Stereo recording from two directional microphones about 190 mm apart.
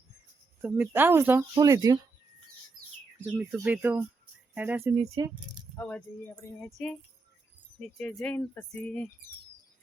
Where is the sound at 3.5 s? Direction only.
10° right (ahead or behind).